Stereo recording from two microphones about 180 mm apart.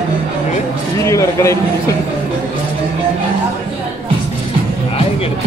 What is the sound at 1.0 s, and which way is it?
Speech, 15° left (ahead or behind).